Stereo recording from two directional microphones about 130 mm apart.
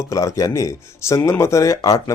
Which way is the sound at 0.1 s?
25° left (ahead or behind).